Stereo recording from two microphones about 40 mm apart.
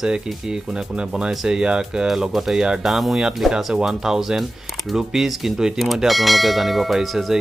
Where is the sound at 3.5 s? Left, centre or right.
Right.